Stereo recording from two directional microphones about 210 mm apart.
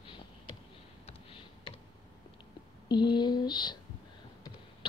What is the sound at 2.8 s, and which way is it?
Speech, 20° left (ahead or behind).